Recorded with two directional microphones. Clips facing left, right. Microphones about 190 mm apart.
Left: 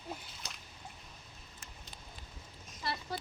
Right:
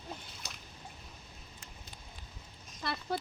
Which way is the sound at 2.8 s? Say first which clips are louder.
Right 3 dB; 55° right (ahead or behind).